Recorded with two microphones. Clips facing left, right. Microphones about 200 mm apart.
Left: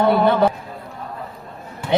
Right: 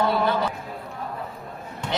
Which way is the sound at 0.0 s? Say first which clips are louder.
Left 7 dB; 60° left (ahead or behind).